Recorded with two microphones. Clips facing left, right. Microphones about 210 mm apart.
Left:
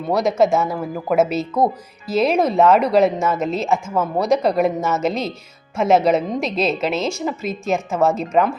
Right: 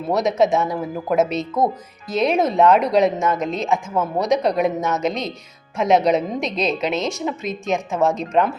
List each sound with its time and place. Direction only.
0.0 s speech: centre (ahead or behind)